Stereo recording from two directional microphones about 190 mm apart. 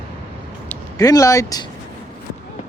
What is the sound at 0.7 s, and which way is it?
Speech, 20° left (ahead or behind).